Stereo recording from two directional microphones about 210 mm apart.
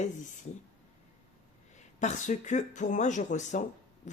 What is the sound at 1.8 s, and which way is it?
A man's voice, 35° left (ahead or behind).